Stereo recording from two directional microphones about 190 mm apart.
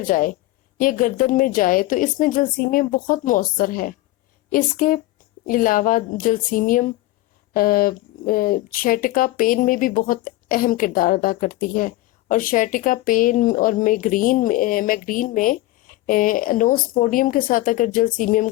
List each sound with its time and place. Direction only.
0.0 s speech: 45° left (ahead or behind)